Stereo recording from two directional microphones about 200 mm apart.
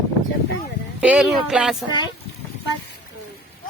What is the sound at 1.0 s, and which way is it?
Speech, 5° right (ahead or behind).